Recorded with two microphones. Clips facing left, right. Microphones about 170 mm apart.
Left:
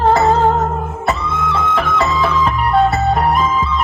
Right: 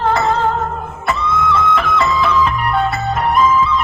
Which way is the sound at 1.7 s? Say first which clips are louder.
Even; 40° left (ahead or behind).